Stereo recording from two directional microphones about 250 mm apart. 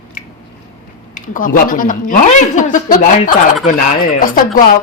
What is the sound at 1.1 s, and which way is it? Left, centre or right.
A woman's voice, left.